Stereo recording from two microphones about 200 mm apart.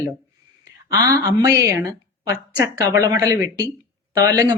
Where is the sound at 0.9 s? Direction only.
15° right (ahead or behind).